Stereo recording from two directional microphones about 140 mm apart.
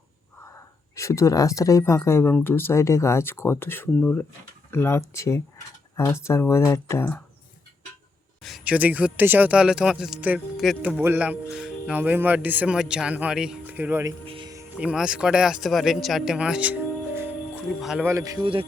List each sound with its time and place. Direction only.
0.4 s speech: 20° left (ahead or behind)
8.4 s speech: centre (ahead or behind)
14.3 s music: 35° right (ahead or behind)
14.8 s a man's voice: 5° right (ahead or behind)
18.0 s speech: 20° right (ahead or behind)